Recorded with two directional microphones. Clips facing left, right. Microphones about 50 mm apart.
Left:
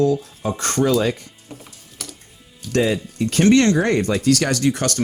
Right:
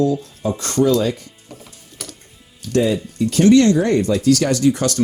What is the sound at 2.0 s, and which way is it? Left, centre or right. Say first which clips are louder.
Music: right 1 dB; centre.